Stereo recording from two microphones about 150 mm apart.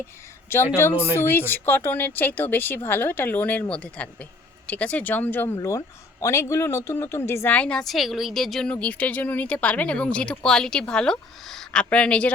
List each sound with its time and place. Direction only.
0.8 s speech: 15° left (ahead or behind)